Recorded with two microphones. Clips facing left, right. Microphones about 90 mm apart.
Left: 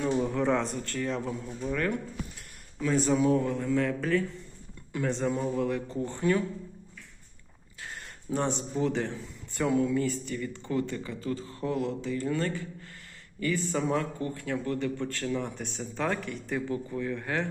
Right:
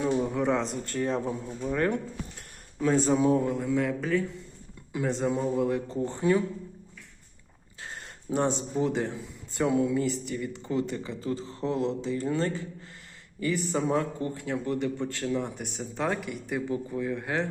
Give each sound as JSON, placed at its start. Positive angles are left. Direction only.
{"t": 0.0, "sound": "a sound", "side_deg": -10}
{"t": 0.9, "sound": "speech", "side_deg": -25}
{"t": 7.8, "sound": "speech", "side_deg": -25}